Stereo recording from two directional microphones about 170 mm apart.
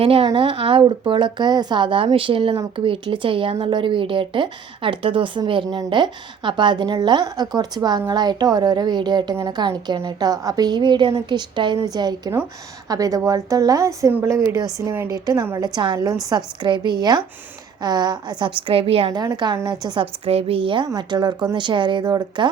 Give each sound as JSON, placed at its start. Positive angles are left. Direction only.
{"t": 0.0, "sound": "a woman's voice", "side_deg": -35}
{"t": 19.2, "sound": "speech", "side_deg": -25}